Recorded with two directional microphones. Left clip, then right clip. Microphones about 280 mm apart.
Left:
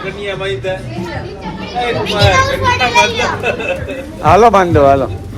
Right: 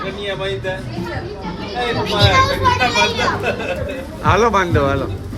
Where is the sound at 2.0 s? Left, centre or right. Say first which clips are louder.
Left 2 dB; right.